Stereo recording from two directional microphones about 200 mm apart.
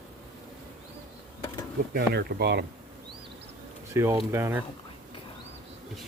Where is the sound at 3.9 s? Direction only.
15° right (ahead or behind).